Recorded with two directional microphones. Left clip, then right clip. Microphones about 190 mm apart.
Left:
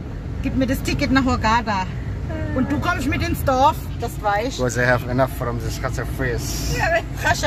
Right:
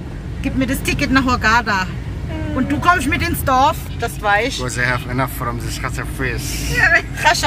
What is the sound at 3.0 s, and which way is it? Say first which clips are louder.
Speech: right 3 dB; 5° right (ahead or behind).